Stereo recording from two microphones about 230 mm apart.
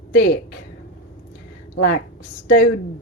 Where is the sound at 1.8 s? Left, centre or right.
Left.